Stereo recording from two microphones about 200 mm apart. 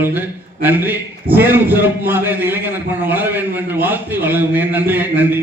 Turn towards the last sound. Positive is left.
turn(degrees=-10)  # may be behind; listen again after turning